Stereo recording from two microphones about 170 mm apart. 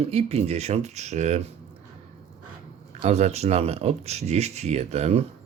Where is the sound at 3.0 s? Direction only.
40° right (ahead or behind).